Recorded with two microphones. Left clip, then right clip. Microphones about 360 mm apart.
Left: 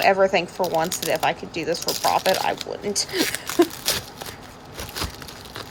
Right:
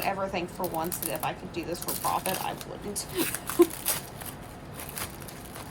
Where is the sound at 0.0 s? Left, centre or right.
Centre.